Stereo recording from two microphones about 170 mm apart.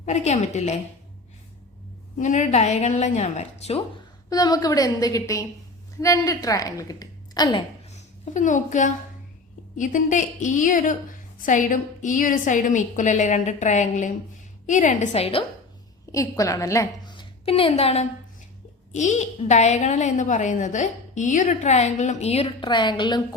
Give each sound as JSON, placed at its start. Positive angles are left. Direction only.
{"t": 0.0, "sound": "a woman's voice", "side_deg": 40}
{"t": 2.1, "sound": "a woman's voice", "side_deg": 45}
{"t": 4.3, "sound": "a woman's voice", "side_deg": 20}
{"t": 7.9, "sound": "a woman's voice", "side_deg": 40}
{"t": 16.1, "sound": "a woman's voice", "side_deg": 20}